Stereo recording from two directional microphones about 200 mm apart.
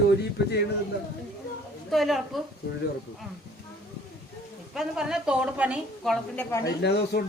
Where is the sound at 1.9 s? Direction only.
Centre (ahead or behind).